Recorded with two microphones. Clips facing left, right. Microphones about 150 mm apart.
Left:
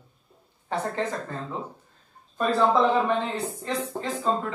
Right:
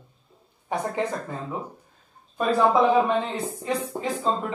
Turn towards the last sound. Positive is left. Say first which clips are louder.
# right 1 dB
turn(degrees=-15)  # may be behind; listen again after turning